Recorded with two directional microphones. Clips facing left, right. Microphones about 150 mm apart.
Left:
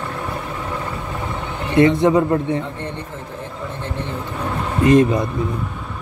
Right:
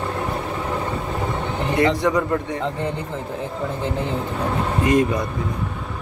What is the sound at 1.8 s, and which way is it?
Speech, 25° left (ahead or behind).